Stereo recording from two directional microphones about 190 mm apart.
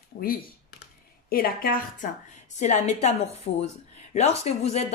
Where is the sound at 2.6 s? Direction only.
35° left (ahead or behind).